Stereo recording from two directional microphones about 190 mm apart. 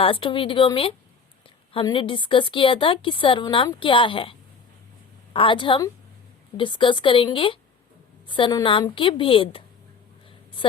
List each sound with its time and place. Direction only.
0.0 s a woman's voice: 30° left (ahead or behind)